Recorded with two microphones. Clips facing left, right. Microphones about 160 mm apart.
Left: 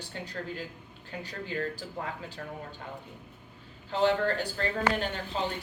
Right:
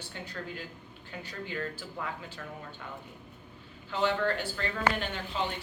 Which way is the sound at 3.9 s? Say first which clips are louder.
Left 3 dB; 35° left (ahead or behind).